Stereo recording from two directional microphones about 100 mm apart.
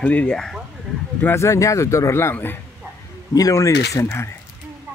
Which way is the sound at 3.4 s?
35° left (ahead or behind).